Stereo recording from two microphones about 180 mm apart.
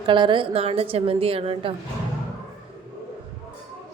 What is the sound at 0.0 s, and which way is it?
A woman's voice, 25° right (ahead or behind).